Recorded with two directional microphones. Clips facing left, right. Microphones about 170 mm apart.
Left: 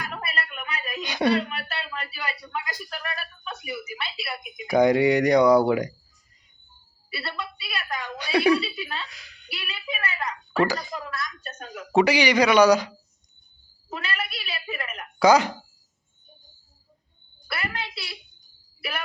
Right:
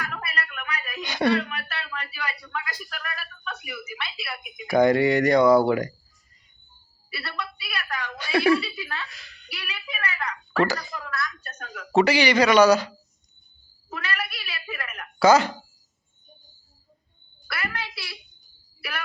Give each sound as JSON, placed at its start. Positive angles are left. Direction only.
{"t": 0.0, "sound": "a sound", "side_deg": 30}
{"t": 3.7, "sound": "a woman's voice", "side_deg": 30}
{"t": 4.6, "sound": "speech", "side_deg": 15}
{"t": 7.1, "sound": "a woman's voice", "side_deg": 30}
{"t": 8.6, "sound": "speech", "side_deg": 25}
{"t": 9.5, "sound": "a sound", "side_deg": 25}
{"t": 11.9, "sound": "speech", "side_deg": 15}
{"t": 13.9, "sound": "cat", "side_deg": 25}
{"t": 15.2, "sound": "speech", "side_deg": 15}
{"t": 17.5, "sound": "a sound", "side_deg": 25}